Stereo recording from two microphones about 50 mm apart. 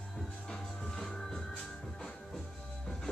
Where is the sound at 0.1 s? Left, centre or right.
Centre.